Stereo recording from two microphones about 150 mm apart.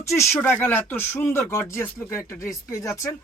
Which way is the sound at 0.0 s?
20° left (ahead or behind).